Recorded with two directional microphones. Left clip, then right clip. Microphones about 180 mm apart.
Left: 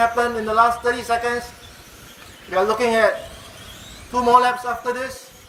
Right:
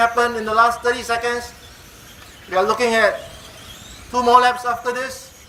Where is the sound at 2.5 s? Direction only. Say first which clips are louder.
Right 1 dB; centre (ahead or behind).